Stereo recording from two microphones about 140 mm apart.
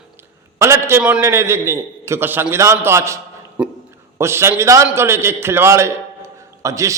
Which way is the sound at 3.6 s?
10° right (ahead or behind).